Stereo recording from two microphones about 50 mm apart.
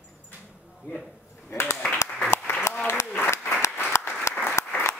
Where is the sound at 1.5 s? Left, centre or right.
Left.